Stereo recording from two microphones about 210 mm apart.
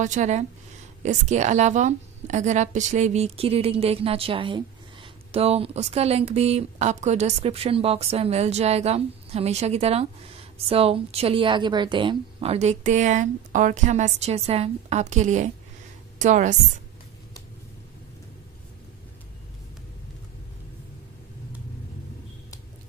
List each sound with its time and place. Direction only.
0.0 s a woman's voice: 35° right (ahead or behind)